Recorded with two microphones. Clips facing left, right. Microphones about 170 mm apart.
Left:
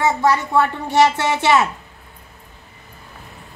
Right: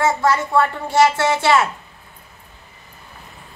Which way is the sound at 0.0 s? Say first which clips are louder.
Even; 15° left (ahead or behind).